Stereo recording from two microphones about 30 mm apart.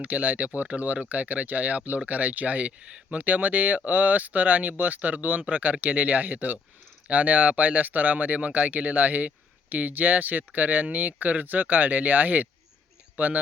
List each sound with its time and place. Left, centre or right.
0.0 s speech: right
2.8 s speech: right
3.2 s speech: right
7.1 s speech: right